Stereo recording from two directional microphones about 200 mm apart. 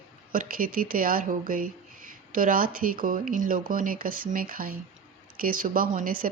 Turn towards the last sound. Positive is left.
turn(degrees=-45)  # may be behind; listen again after turning